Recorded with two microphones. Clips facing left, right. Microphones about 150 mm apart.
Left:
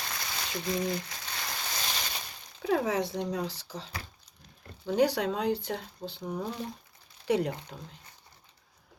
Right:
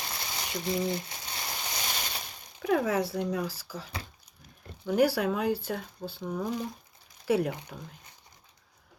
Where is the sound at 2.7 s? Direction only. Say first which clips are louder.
Right 1 dB; 25° left (ahead or behind).